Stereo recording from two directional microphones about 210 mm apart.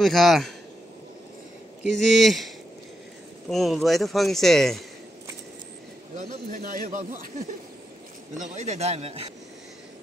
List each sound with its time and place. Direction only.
0.0 s speech: centre (ahead or behind)
1.8 s speech: centre (ahead or behind)
6.1 s a man's voice: 40° right (ahead or behind)
8.5 s a man's voice: 35° right (ahead or behind)